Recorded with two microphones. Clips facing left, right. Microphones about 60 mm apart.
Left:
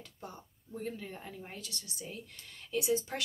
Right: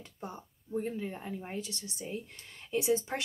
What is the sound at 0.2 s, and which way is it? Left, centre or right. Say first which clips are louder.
Speech: right 5 dB; centre.